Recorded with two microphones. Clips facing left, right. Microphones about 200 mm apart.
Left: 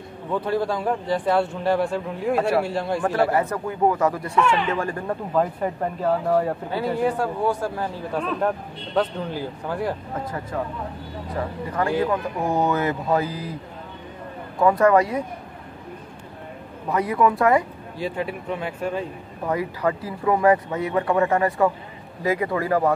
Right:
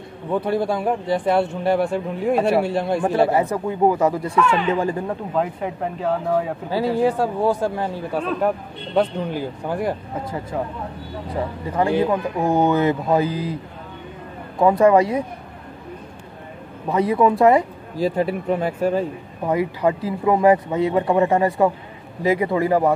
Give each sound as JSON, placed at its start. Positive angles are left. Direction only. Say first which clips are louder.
{"t": 0.3, "sound": "speech", "louder": "right 3 dB", "side_deg": -15}
{"t": 5.0, "sound": "speech", "louder": "even", "side_deg": -5}
{"t": 7.0, "sound": "speech", "louder": "right 3 dB", "side_deg": -30}
{"t": 8.9, "sound": "speech", "louder": "right 3 dB", "side_deg": -15}
{"t": 14.6, "sound": "speech", "louder": "right 3 dB", "side_deg": -20}
{"t": 16.9, "sound": "speech", "louder": "right 3 dB", "side_deg": -25}
{"t": 17.9, "sound": "speech", "louder": "right 7 dB", "side_deg": -40}
{"t": 19.4, "sound": "speech", "louder": "right 4 dB", "side_deg": -20}